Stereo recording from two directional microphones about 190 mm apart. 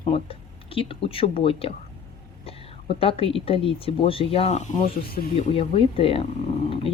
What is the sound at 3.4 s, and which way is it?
Speech, 30° left (ahead or behind).